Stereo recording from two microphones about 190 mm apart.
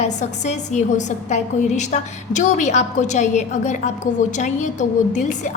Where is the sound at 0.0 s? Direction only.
40° left (ahead or behind).